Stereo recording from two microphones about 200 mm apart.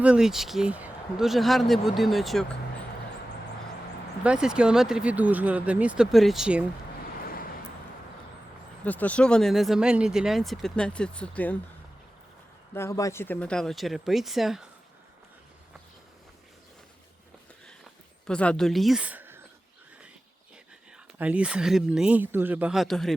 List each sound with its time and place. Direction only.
0.0 s speech: 5° right (ahead or behind)
4.2 s speech: 5° right (ahead or behind)
7.2 s vehicle: 45° left (ahead or behind)
8.8 s speech: 5° left (ahead or behind)
12.7 s speech: 15° left (ahead or behind); by 14.7 s centre (ahead or behind)
18.3 s speech: 5° left (ahead or behind)
21.2 s speech: 5° right (ahead or behind)